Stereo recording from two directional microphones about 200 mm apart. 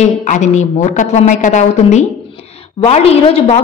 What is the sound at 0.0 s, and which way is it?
A woman's voice, 35° left (ahead or behind).